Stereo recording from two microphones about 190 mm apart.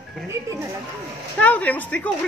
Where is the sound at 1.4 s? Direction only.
10° left (ahead or behind).